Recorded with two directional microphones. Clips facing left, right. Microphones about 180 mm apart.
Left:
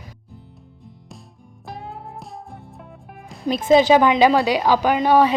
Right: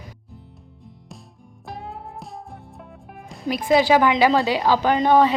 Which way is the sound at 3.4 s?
25° left (ahead or behind).